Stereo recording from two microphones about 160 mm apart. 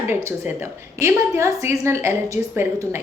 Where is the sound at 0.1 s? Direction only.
15° right (ahead or behind).